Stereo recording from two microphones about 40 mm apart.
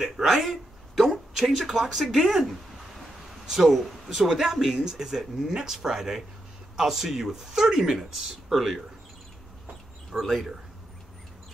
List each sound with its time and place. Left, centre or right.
0.2 s a sound: centre
1.6 s speech: centre
3.4 s speech: centre
8.0 s speech: centre
10.1 s speech: centre